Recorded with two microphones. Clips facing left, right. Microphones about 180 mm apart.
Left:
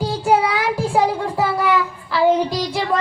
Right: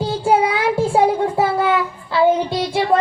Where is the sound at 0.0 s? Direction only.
25° right (ahead or behind).